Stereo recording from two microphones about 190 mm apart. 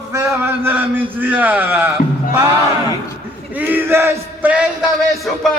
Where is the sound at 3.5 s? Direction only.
10° right (ahead or behind).